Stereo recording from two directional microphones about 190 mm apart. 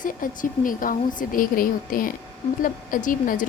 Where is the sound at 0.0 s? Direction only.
45° left (ahead or behind).